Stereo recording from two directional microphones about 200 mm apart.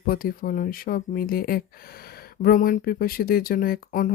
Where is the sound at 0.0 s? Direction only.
45° left (ahead or behind).